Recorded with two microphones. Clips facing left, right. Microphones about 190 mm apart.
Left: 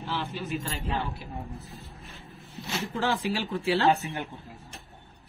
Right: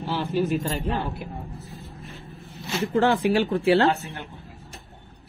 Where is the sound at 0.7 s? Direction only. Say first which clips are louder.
Right 5 dB; 45° right (ahead or behind).